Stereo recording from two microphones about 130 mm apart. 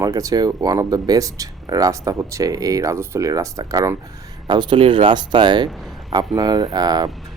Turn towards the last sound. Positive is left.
turn(degrees=-30)  # may be behind; listen again after turning